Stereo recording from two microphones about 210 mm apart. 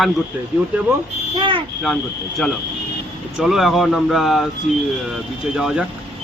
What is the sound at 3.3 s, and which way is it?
Speech, centre (ahead or behind).